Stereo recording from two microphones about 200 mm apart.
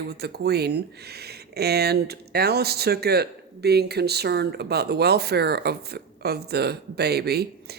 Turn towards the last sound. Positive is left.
turn(degrees=-50)  # may be behind; listen again after turning